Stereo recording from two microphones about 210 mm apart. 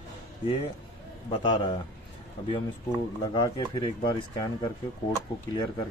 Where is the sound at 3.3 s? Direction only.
15° left (ahead or behind).